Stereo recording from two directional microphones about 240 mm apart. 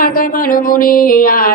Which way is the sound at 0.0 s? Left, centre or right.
Left.